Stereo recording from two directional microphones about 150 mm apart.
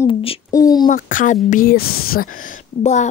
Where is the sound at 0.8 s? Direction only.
65° left (ahead or behind).